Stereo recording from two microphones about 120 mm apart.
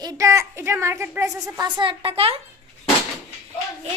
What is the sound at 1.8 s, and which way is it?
Speech, 45° right (ahead or behind).